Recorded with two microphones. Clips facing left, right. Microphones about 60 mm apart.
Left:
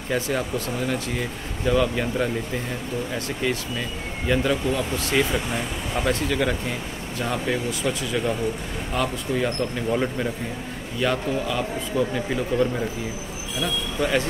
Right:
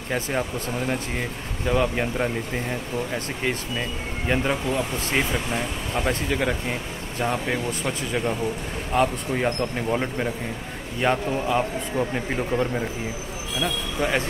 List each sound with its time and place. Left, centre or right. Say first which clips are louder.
0.1 s speech: left 1 dB; centre
8.9 s speech: right 3 dB; right
9.8 s speech: left 3 dB; centre
11.0 s speech: right 1 dB; right